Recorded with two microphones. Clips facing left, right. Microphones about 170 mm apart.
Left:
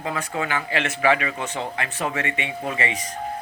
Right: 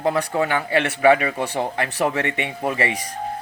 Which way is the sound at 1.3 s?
60° right (ahead or behind).